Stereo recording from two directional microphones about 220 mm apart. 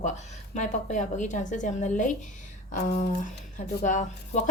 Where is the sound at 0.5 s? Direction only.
35° left (ahead or behind).